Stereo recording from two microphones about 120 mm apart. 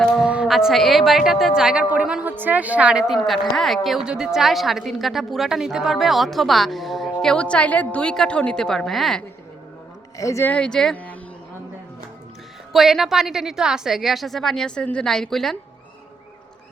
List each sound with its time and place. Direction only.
0.2 s a woman's voice: 5° right (ahead or behind)
3.2 s a woman's voice: 5° left (ahead or behind)
10.2 s speech: 25° left (ahead or behind)
10.5 s speech: 5° left (ahead or behind)
12.7 s a woman's voice: centre (ahead or behind)